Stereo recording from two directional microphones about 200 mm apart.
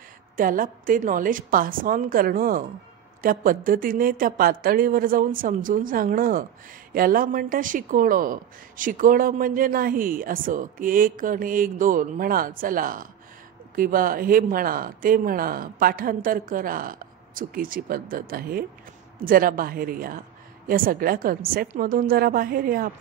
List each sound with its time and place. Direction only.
0.4 s a woman's voice: 45° right (ahead or behind)